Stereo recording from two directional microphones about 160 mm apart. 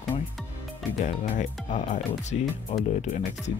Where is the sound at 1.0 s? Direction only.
45° left (ahead or behind).